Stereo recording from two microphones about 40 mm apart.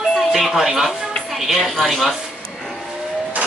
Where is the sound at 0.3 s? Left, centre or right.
Centre.